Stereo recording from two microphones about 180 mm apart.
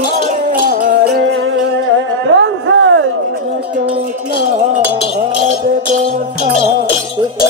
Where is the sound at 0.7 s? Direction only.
60° right (ahead or behind).